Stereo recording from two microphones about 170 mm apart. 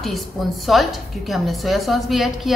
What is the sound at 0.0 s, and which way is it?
A woman's voice, centre (ahead or behind).